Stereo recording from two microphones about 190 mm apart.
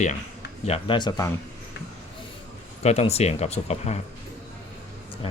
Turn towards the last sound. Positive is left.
turn(degrees=35)  # may be behind; listen again after turning